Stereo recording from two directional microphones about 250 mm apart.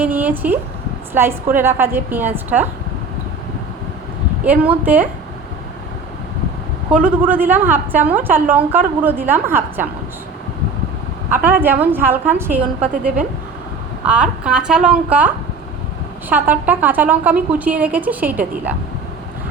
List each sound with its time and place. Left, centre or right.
0.0 s a woman's voice: centre
4.4 s a woman's voice: centre
6.9 s a woman's voice: centre
11.4 s a woman's voice: centre
14.0 s a woman's voice: centre
16.3 s a woman's voice: centre